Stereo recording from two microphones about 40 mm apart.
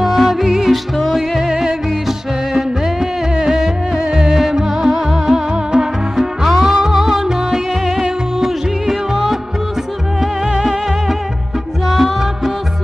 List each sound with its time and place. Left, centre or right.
0.0 s music: centre
1.5 s music: centre
5.5 s music: centre
10.4 s music: centre